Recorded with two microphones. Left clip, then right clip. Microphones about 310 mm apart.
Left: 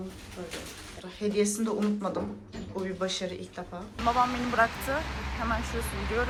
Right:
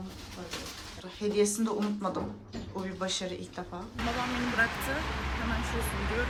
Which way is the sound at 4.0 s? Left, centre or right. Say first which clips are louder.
Left 7 dB; centre.